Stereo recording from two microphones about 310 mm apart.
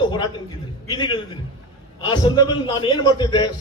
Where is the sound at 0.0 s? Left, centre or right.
Centre.